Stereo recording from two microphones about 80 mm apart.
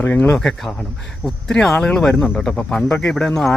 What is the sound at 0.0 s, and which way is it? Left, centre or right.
Speech, left.